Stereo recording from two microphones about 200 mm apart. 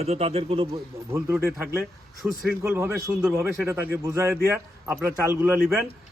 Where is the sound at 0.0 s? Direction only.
30° right (ahead or behind).